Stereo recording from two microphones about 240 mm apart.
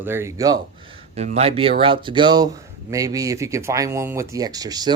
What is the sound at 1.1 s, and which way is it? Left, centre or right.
Speech, right.